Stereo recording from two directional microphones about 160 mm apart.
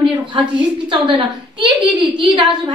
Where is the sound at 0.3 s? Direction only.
30° right (ahead or behind).